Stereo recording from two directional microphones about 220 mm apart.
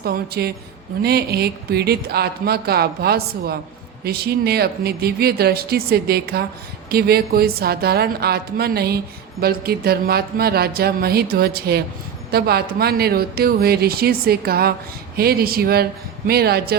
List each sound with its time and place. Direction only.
0.0 s speech: 45° right (ahead or behind)